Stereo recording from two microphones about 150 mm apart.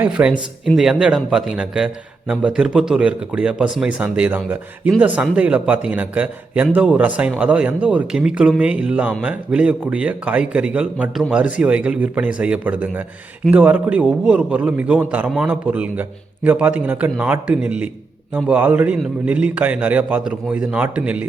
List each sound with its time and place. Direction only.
0.0 s a man's voice: 5° right (ahead or behind)